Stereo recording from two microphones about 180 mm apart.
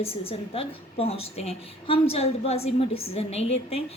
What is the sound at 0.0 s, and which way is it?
A woman's voice, 30° left (ahead or behind).